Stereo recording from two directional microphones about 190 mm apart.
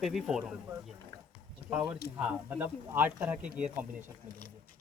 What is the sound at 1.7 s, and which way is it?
Speech, 5° right (ahead or behind).